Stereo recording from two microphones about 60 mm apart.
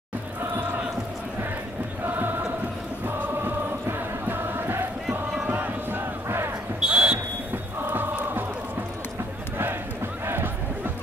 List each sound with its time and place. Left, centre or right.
2.0 s chant: right
4.3 s music: right
5.5 s a sound: right
6.2 s basketball bounce: right
6.8 s smoke detector: centre
7.8 s music: right
10.2 s a sound: right